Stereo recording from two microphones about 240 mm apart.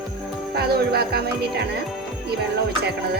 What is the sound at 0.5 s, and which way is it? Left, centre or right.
Music, right.